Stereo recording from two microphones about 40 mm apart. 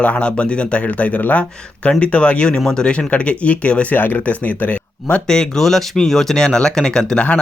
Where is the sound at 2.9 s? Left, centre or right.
Left.